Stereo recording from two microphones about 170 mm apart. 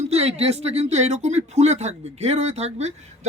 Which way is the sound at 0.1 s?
40° right (ahead or behind).